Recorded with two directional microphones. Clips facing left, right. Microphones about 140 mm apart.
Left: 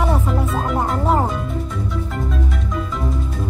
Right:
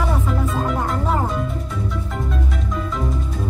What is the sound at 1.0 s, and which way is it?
Speech, 25° left (ahead or behind).